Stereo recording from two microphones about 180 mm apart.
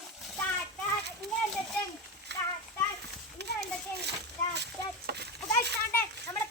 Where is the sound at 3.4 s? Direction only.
70° right (ahead or behind).